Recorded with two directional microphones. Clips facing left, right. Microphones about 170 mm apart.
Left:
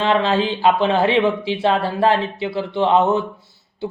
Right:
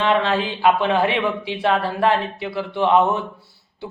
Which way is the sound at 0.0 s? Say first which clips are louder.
Left 2 dB; 30° left (ahead or behind).